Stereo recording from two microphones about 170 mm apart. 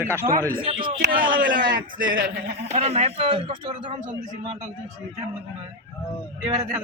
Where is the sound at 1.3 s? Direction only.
55° right (ahead or behind).